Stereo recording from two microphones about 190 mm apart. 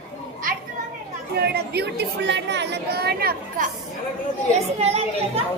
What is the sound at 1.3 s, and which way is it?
A woman's voice, 60° right (ahead or behind).